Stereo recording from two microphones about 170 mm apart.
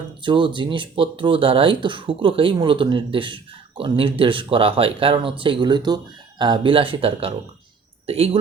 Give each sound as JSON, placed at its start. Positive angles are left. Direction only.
{"t": 0.2, "sound": "speech", "side_deg": -30}